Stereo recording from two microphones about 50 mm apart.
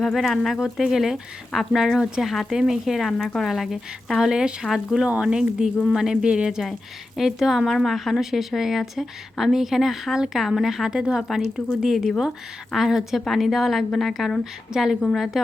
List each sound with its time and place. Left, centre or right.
0.0 s a woman's voice: centre
5.2 s a woman's voice: centre
14.7 s a woman's voice: centre